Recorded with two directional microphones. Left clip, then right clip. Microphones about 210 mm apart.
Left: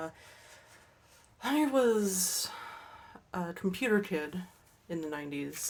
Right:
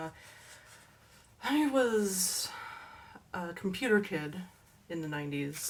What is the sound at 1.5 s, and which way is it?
Speech, 45° left (ahead or behind).